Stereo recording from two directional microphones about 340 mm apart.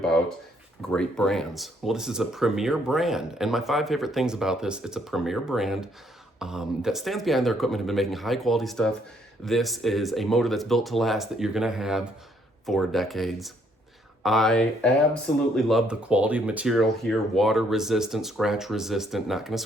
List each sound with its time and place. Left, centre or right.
0.0 s speech: centre